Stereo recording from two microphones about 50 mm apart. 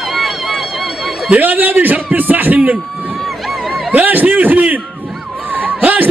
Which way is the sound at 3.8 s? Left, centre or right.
Right.